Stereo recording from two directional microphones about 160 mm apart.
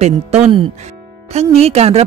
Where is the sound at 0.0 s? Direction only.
40° right (ahead or behind).